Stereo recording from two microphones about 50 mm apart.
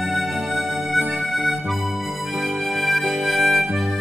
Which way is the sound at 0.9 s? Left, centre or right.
Right.